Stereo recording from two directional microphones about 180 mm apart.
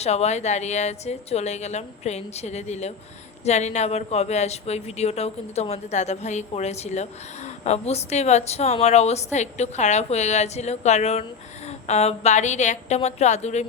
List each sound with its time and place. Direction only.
0.0 s speech: 35° left (ahead or behind)